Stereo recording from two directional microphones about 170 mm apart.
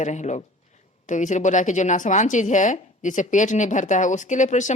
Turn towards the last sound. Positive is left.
turn(degrees=45)  # may be behind; listen again after turning